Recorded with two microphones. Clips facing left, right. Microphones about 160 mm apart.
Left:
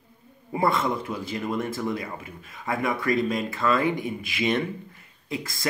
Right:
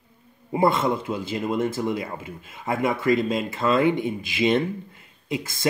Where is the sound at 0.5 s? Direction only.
25° right (ahead or behind).